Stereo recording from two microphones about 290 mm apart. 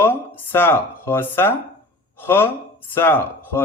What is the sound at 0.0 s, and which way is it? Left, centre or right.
Speech, centre.